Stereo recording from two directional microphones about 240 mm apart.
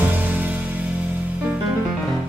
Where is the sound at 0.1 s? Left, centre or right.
Centre.